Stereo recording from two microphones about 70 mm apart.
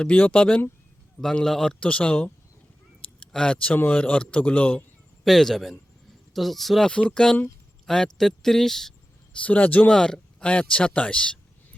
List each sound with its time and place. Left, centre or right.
0.0 s speech: centre
5.2 s speech: centre
6.9 s speech: centre
9.4 s speech: left
9.9 s speech: centre